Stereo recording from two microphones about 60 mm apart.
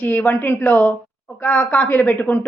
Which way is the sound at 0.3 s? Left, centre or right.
Left.